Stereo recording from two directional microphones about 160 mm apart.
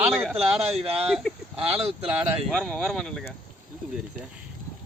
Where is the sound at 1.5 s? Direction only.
35° right (ahead or behind).